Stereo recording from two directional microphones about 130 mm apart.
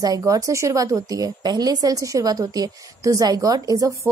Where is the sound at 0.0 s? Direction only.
25° right (ahead or behind).